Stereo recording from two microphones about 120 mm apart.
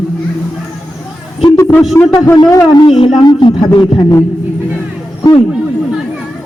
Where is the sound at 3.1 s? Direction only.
40° left (ahead or behind).